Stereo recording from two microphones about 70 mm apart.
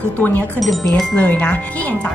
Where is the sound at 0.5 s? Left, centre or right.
Centre.